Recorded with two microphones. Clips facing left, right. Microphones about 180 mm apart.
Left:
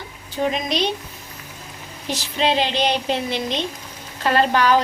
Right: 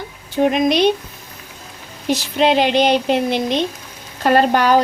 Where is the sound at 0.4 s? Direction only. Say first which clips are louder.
Right 7 dB; 55° right (ahead or behind).